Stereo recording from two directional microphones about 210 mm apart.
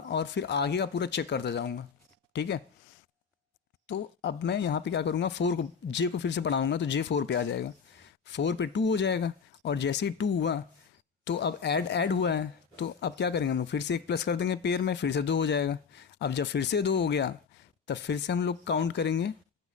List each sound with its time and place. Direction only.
0.1 s speech: 55° left (ahead or behind)
3.8 s speech: 55° left (ahead or behind)